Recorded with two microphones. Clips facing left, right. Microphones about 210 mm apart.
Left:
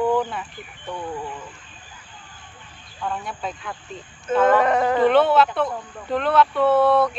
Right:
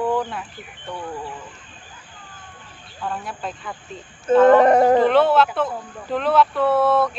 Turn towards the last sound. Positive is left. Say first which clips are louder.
# left 1 dB
turn(degrees=0)  # may be behind; listen again after turning